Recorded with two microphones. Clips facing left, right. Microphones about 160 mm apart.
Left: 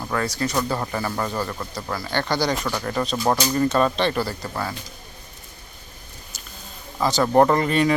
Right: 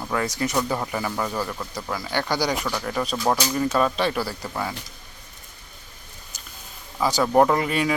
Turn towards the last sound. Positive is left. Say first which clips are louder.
# left 3 dB
turn(degrees=-5)  # may be behind; listen again after turning